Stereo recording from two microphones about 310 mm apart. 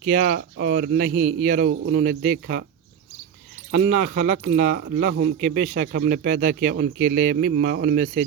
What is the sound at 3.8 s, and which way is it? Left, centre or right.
Speech, right.